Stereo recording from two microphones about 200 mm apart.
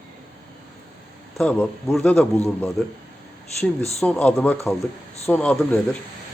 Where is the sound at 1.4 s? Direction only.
5° left (ahead or behind).